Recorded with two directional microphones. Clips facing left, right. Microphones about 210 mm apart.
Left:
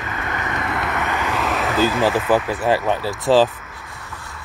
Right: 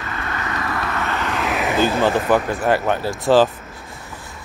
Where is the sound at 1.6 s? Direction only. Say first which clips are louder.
Right 1 dB; 15° right (ahead or behind).